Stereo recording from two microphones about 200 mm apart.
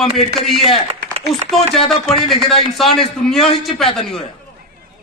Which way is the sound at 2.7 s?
Centre (ahead or behind).